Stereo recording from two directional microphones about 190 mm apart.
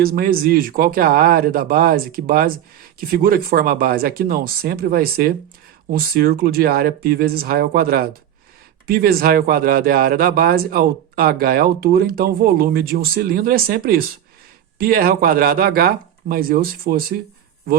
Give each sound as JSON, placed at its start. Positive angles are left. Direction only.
{"t": 0.0, "sound": "speech", "side_deg": -50}